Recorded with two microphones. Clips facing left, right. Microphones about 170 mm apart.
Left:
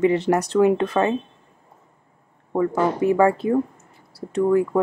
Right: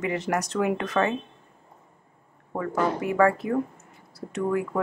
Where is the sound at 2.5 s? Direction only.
25° left (ahead or behind).